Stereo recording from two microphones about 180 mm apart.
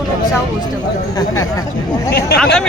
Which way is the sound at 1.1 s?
20° left (ahead or behind).